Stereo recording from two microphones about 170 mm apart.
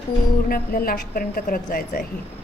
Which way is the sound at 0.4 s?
60° left (ahead or behind).